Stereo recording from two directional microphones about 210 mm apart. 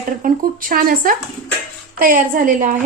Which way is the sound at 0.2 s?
40° right (ahead or behind).